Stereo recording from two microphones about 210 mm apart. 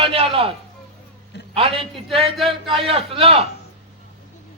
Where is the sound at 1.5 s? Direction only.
25° right (ahead or behind).